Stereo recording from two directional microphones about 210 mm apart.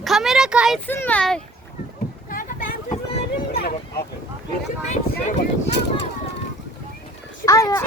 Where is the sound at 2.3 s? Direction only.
40° left (ahead or behind).